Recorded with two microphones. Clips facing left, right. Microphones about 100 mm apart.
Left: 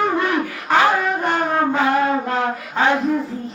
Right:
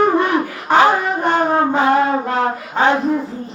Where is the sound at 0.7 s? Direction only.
25° right (ahead or behind).